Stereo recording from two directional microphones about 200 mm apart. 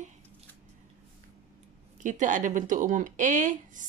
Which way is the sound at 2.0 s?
40° right (ahead or behind).